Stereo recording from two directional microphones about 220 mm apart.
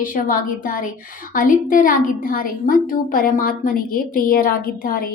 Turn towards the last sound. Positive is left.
turn(degrees=40)  # may be behind; listen again after turning